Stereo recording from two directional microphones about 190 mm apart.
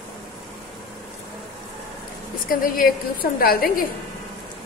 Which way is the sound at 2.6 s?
50° left (ahead or behind).